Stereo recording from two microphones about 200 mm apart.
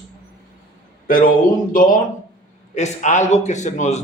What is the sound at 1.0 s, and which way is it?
Speech, 45° left (ahead or behind).